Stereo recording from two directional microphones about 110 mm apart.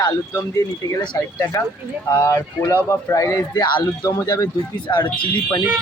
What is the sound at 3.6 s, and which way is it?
Speech, 40° left (ahead or behind).